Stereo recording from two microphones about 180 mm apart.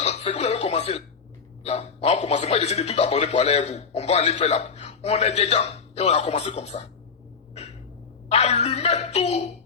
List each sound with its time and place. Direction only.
0.0 s a sound: 35° left (ahead or behind)
1.6 s a man's voice: 35° left (ahead or behind)
8.3 s a man's voice: 35° left (ahead or behind)